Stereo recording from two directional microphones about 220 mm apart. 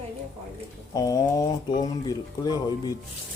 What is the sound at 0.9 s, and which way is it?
Speech, 15° left (ahead or behind).